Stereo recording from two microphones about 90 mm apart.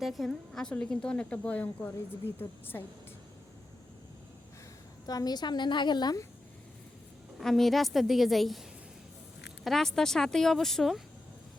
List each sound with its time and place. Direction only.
0.0 s a woman's voice: centre (ahead or behind); by 2.8 s 25° left (ahead or behind)
5.0 s a woman's voice: 45° left (ahead or behind)
7.3 s speech: centre (ahead or behind)
9.6 s speech: 5° left (ahead or behind)